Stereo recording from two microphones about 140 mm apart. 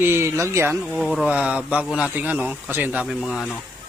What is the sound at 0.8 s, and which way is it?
A man's voice, centre (ahead or behind).